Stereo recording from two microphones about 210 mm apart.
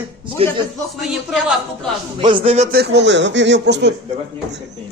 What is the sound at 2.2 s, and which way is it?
Speech, 25° right (ahead or behind).